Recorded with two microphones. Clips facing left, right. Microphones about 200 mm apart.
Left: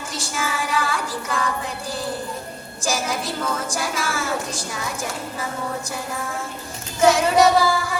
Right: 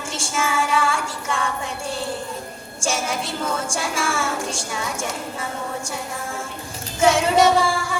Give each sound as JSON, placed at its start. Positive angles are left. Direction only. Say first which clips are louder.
{"t": 0.1, "sound": "a sound", "louder": "right 3 dB", "side_deg": -25}
{"t": 2.8, "sound": "a woman's voice", "louder": "even", "side_deg": -30}
{"t": 7.0, "sound": "a woman's voice", "louder": "left 1 dB", "side_deg": -30}